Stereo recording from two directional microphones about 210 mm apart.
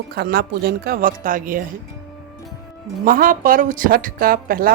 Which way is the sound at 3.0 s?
40° right (ahead or behind).